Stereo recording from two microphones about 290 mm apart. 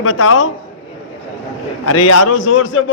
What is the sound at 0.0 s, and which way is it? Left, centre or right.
Speech, left.